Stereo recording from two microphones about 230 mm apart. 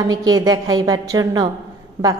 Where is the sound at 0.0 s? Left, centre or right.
Centre.